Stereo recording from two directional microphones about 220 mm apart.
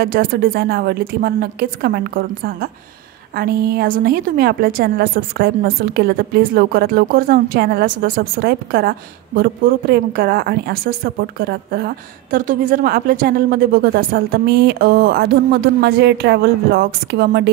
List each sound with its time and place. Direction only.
0.0 s a woman's voice: 45° right (ahead or behind)